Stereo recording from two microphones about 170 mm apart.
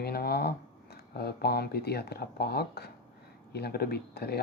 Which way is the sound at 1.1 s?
70° left (ahead or behind).